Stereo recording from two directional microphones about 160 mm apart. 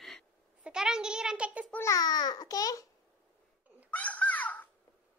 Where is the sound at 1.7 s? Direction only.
20° left (ahead or behind).